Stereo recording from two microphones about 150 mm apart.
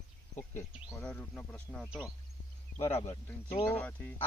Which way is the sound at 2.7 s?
45° left (ahead or behind).